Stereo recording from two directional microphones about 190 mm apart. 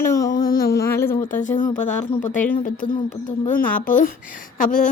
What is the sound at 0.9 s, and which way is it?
Speech, 15° left (ahead or behind).